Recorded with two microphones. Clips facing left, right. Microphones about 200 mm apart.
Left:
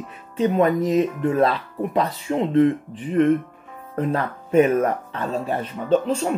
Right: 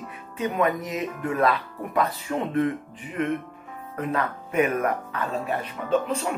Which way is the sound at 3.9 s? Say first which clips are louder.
Left 4 dB; 30° left (ahead or behind).